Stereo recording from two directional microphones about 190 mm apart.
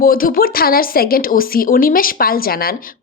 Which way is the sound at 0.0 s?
50° left (ahead or behind).